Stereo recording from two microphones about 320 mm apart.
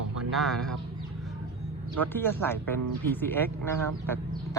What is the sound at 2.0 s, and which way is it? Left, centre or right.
Speech, centre.